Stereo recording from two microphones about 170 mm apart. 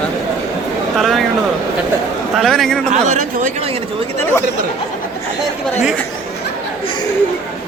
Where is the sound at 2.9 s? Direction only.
45° right (ahead or behind).